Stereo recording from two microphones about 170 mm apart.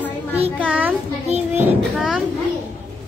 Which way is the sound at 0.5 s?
10° right (ahead or behind).